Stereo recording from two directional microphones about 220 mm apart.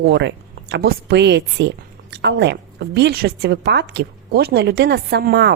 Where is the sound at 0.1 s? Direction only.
50° right (ahead or behind).